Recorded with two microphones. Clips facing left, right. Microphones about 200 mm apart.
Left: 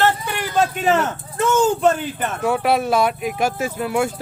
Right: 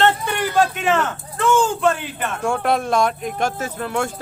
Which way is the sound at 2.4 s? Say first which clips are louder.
Left 2 dB; 5° left (ahead or behind).